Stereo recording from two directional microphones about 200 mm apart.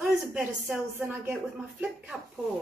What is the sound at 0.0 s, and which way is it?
A woman's voice, 5° right (ahead or behind).